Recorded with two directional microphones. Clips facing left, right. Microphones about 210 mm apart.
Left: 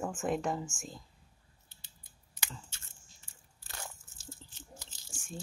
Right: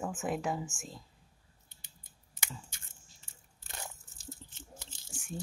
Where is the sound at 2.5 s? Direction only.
15° right (ahead or behind).